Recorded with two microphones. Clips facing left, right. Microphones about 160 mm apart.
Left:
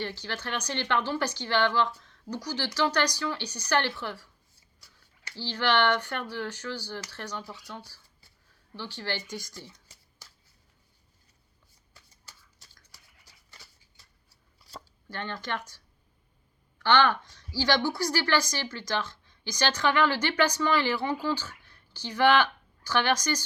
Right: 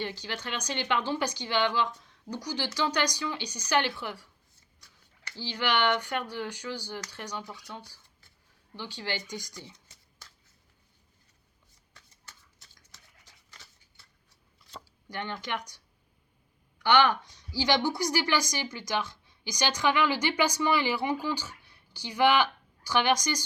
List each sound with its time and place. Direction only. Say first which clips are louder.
0.0 s a woman's voice: left 1 dB; 15° right (ahead or behind)
5.4 s a woman's voice: left 2 dB; 15° right (ahead or behind)
15.1 s a woman's voice: even; 15° right (ahead or behind)